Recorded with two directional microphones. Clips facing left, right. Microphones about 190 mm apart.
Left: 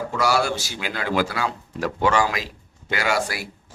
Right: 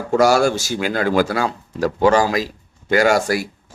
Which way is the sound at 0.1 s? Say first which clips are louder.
Right 9 dB; 45° right (ahead or behind).